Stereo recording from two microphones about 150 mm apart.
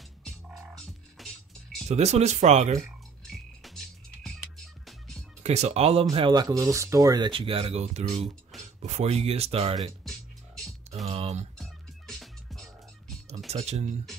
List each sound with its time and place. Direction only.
0.2 s music: centre (ahead or behind)
1.9 s speech: 45° right (ahead or behind)
3.3 s music: centre (ahead or behind)
5.4 s speech: 45° right (ahead or behind)
6.1 s speech: 30° right (ahead or behind)
9.8 s music: centre (ahead or behind)
11.1 s music: 45° right (ahead or behind)
11.5 s music: centre (ahead or behind)
13.5 s speech: 45° right (ahead or behind)